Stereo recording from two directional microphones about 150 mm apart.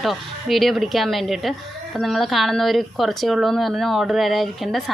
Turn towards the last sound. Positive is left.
turn(degrees=0)  # may be behind; listen again after turning